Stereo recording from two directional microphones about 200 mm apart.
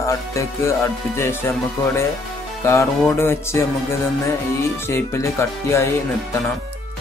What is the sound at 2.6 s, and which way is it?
Speech, 15° left (ahead or behind).